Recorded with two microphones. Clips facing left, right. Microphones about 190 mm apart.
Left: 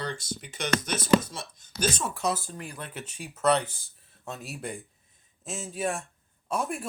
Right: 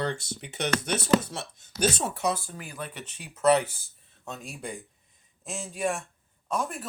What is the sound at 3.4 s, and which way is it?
Speech, 5° right (ahead or behind).